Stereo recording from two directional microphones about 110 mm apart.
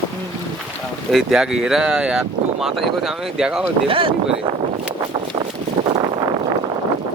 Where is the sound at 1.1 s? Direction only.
5° right (ahead or behind).